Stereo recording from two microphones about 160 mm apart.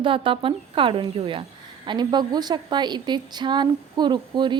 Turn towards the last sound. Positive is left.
turn(degrees=-30)  # may be behind; listen again after turning